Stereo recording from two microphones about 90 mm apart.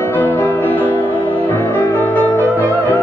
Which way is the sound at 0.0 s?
20° left (ahead or behind).